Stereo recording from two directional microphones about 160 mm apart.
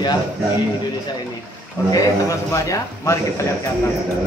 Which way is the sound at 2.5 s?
20° left (ahead or behind).